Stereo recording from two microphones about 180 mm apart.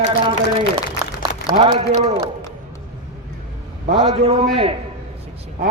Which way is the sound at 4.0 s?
30° right (ahead or behind).